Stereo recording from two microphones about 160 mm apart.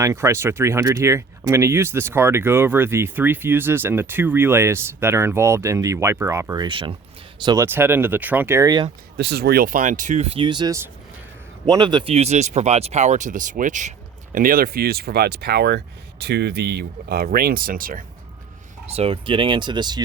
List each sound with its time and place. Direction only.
0.0 s speech: 20° right (ahead or behind)
7.4 s speech: 20° right (ahead or behind)
9.1 s speech: 90° right; by 13.9 s 50° right (ahead or behind)
14.3 s speech: 60° right (ahead or behind)
18.9 s speech: 40° right (ahead or behind)